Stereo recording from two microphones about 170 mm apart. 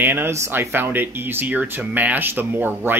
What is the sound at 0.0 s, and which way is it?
Speech, 10° right (ahead or behind).